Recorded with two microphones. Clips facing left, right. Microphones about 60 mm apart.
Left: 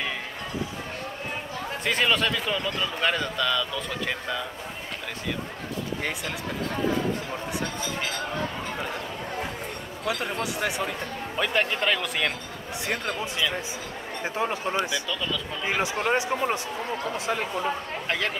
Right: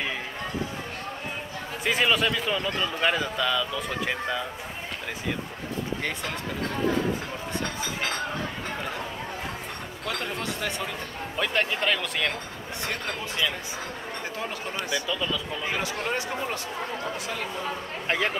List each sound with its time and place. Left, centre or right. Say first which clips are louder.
1.9 s speech: right 1 dB; centre
10.0 s speech: left 3 dB; centre
12.8 s speech: left 3 dB; centre
15.0 s speech: right 1 dB; centre
15.6 s speech: left 7 dB; centre
18.0 s speech: right 3 dB; centre